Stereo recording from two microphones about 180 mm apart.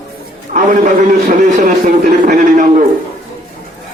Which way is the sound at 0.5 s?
45° right (ahead or behind).